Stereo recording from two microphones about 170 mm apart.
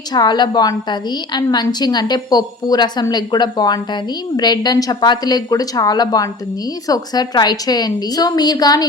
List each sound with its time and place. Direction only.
0.1 s a woman's voice: 25° left (ahead or behind)